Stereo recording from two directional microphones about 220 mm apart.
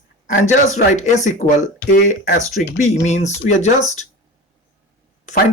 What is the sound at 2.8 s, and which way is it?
Speech, 30° left (ahead or behind).